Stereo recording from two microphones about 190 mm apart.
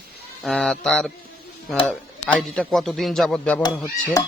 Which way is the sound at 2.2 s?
5° left (ahead or behind).